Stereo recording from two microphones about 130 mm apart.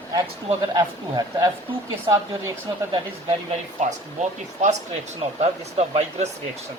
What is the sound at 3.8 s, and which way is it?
Speech, 65° right (ahead or behind).